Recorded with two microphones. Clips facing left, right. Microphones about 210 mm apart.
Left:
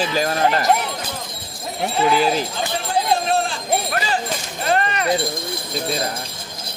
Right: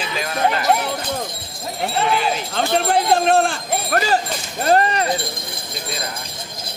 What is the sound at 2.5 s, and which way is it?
Jingle bell, 65° right (ahead or behind).